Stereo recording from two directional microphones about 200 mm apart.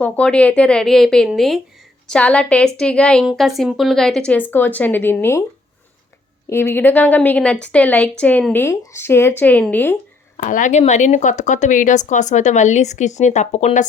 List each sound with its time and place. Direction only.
0.0 s a woman's voice: 5° left (ahead or behind)
6.5 s a woman's voice: 10° left (ahead or behind)
10.3 s speech: 40° left (ahead or behind)